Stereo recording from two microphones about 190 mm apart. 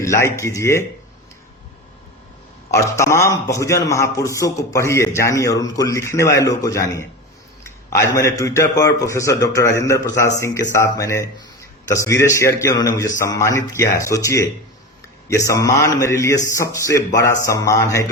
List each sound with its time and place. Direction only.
0.0 s a man's voice: 15° left (ahead or behind)
2.7 s a man's voice: 15° left (ahead or behind)